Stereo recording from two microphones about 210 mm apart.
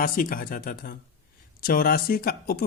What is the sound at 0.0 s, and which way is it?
Speech, 40° left (ahead or behind).